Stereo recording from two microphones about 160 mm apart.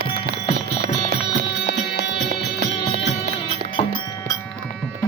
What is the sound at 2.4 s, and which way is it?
Music, 90° left.